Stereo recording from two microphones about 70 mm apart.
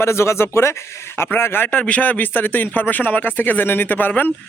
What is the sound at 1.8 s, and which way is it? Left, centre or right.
A man's voice, centre.